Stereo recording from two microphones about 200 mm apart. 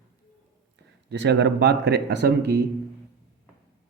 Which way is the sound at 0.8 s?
60° right (ahead or behind).